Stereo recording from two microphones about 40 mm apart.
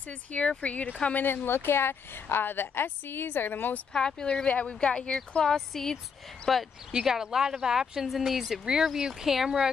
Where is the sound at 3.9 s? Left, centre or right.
Left.